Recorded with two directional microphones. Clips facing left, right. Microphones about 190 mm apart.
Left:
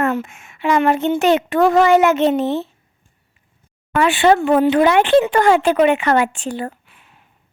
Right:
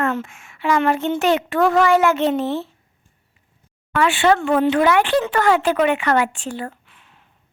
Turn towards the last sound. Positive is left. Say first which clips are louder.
# left 1 dB
turn(degrees=10)  # may be behind; listen again after turning